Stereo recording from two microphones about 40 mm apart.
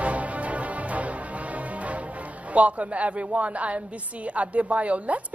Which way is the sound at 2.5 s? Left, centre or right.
Right.